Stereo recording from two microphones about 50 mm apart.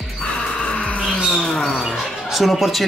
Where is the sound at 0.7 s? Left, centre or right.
Left.